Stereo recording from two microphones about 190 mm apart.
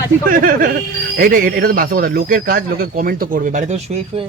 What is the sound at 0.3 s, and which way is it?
Speech, 50° right (ahead or behind).